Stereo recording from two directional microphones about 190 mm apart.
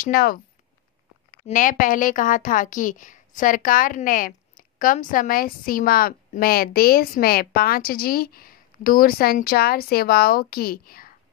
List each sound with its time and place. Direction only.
0.0 s a woman's voice: 50° left (ahead or behind)
1.4 s a woman's voice: 45° left (ahead or behind)